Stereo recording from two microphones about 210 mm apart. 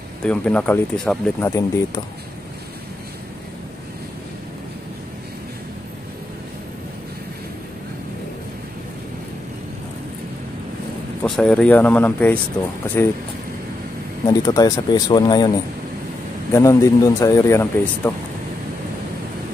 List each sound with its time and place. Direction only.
0.2 s speech: 5° left (ahead or behind)
11.2 s speech: 5° left (ahead or behind)
14.2 s speech: 15° left (ahead or behind)
16.5 s speech: 15° left (ahead or behind)